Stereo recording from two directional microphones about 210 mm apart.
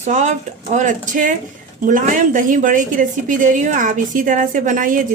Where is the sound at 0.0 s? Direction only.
35° right (ahead or behind).